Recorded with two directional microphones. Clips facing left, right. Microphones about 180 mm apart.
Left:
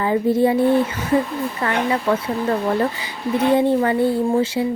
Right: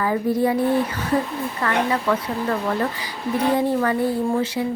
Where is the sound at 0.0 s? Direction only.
25° left (ahead or behind).